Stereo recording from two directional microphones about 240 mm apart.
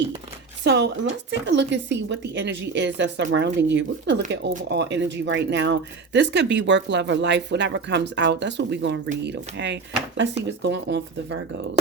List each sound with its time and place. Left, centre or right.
0.6 s speech: right